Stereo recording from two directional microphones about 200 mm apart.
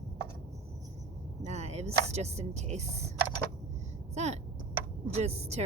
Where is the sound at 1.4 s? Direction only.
35° right (ahead or behind).